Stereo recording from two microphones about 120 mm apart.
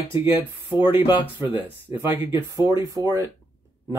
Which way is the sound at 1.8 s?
20° right (ahead or behind).